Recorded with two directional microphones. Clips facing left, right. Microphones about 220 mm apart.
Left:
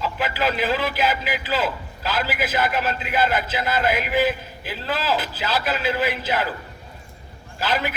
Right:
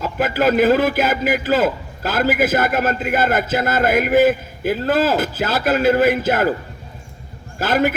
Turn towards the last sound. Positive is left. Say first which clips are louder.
# right 7 dB
turn(degrees=-45)  # may be behind; listen again after turning